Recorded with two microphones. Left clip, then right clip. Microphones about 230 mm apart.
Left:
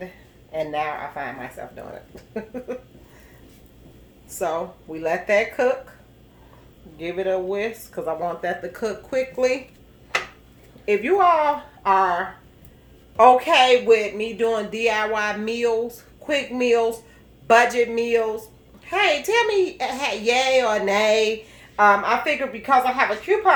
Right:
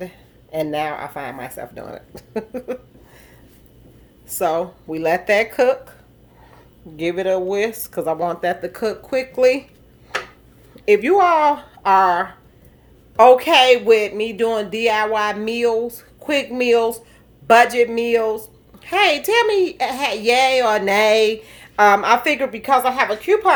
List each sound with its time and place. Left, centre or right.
0.5 s speech: right
4.3 s speech: right
6.9 s speech: right
10.8 s a woman's voice: right